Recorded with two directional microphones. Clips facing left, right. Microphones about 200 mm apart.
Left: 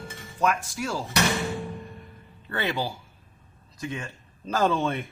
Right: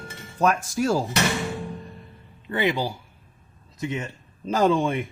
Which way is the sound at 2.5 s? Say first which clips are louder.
Right 4 dB; 15° right (ahead or behind).